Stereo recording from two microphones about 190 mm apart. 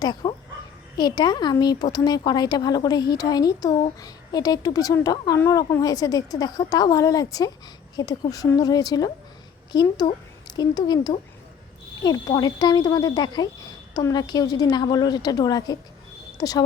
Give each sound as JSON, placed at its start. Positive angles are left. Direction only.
{"t": 0.0, "sound": "speech", "side_deg": 20}